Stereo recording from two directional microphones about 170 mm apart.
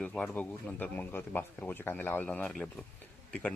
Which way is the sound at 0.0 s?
5° left (ahead or behind).